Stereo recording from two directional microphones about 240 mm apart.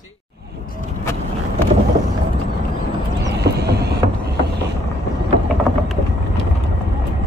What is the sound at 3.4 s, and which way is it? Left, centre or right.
Mechanisms, right.